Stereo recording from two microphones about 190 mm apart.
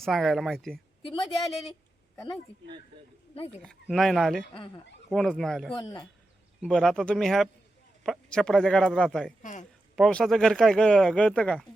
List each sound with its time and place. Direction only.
0.0 s speech: centre (ahead or behind)
1.0 s speech: 25° left (ahead or behind)
3.6 s speech: centre (ahead or behind)
5.7 s speech: 20° left (ahead or behind)
6.6 s speech: centre (ahead or behind)
9.4 s a woman's voice: 40° left (ahead or behind)
9.9 s speech: 5° left (ahead or behind)